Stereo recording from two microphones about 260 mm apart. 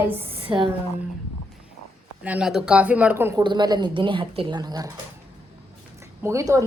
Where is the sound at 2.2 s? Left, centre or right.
Centre.